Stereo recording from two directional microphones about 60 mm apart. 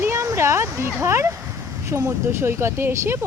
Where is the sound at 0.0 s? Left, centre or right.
Right.